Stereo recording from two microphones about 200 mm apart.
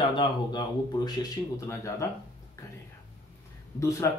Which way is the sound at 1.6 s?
15° left (ahead or behind).